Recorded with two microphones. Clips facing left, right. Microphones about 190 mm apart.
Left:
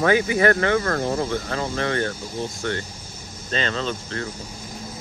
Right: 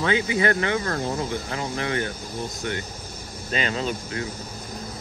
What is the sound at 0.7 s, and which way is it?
Speech, 55° left (ahead or behind).